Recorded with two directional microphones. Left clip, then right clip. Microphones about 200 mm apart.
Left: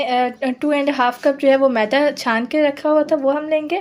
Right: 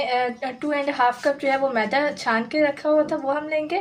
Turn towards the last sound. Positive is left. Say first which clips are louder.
# left 6 dB
turn(degrees=45)  # may be behind; listen again after turning